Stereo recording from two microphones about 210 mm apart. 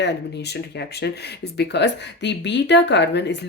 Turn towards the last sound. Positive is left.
turn(degrees=55)  # may be behind; listen again after turning